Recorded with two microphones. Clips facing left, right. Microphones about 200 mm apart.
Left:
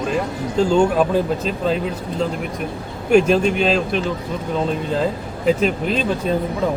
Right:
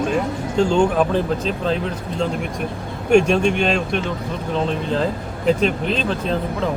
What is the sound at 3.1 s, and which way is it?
Speech, 5° left (ahead or behind).